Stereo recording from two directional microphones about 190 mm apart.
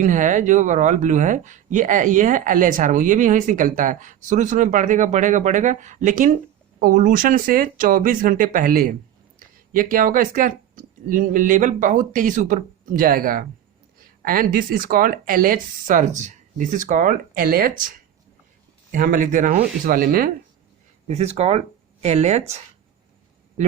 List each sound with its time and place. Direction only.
0.0 s speech: 40° right (ahead or behind)
21.1 s speech: 35° right (ahead or behind)